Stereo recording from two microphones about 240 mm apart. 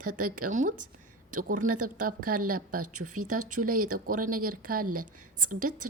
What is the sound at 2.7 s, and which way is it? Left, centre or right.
Speech, right.